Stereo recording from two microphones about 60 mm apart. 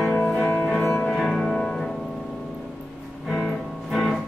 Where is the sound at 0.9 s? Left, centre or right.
Centre.